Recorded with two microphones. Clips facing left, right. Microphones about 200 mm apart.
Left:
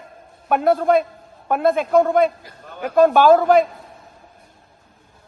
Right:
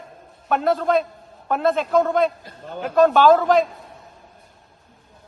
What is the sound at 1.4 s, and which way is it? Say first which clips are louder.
A man's voice: left 2 dB; 10° left (ahead or behind).